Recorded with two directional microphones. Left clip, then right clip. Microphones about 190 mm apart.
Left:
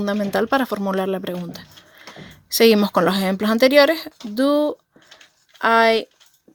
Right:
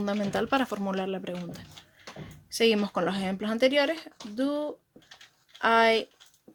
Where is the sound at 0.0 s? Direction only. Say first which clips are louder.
Left 8 dB; 25° left (ahead or behind).